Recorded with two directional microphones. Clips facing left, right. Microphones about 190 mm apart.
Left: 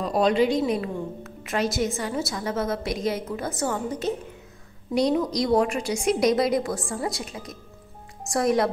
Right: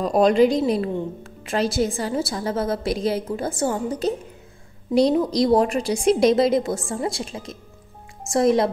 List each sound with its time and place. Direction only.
0.0 s a woman's voice: 45° right (ahead or behind); by 8.6 s 25° right (ahead or behind)